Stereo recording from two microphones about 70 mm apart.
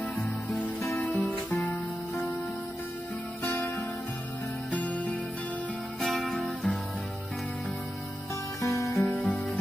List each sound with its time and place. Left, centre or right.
0.9 s music: left
3.4 s music: left
5.9 s music: centre
8.5 s music: left
9.0 s music: left